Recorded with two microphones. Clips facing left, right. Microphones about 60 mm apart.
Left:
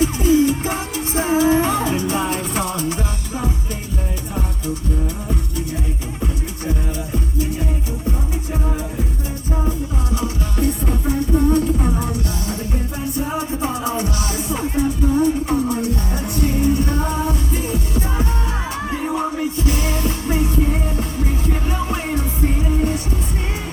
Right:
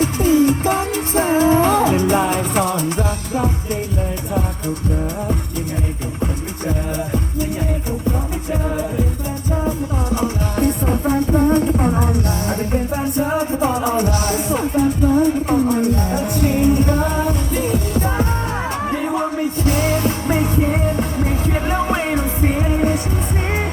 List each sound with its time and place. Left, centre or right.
0.0 s music: right
1.6 s music: right
10.2 s music: right
20.2 s music: right